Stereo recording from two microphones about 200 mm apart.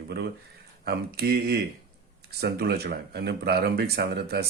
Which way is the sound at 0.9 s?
55° right (ahead or behind).